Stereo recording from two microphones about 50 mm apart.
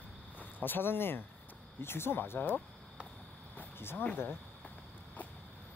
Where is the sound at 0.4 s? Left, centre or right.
Left.